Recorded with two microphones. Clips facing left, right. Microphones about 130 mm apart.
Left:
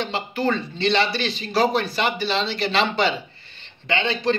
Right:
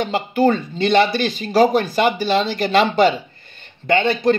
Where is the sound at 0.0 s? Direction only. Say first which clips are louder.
Right 7 dB; 45° right (ahead or behind).